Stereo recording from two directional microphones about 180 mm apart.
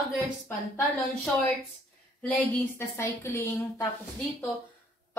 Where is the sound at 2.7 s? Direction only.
15° left (ahead or behind).